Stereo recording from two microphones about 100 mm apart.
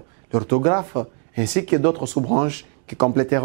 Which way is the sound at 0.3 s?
20° right (ahead or behind).